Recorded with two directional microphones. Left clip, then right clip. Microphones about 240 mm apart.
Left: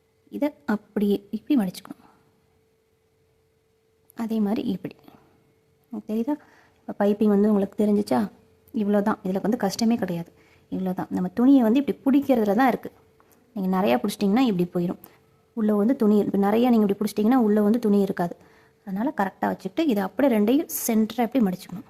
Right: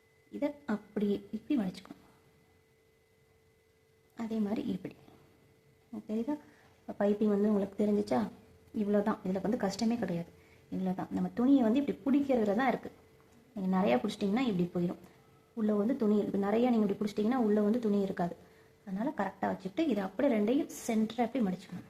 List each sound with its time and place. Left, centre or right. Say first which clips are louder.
0.3 s speech: left 9 dB; left
4.1 s speech: left 9 dB; left